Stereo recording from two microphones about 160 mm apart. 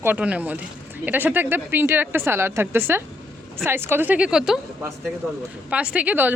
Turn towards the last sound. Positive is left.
turn(degrees=-10)  # may be behind; listen again after turning